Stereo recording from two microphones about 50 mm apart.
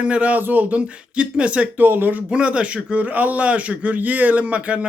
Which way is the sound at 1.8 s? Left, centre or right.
Right.